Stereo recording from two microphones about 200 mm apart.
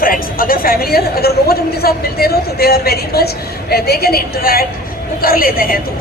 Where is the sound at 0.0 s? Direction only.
45° left (ahead or behind).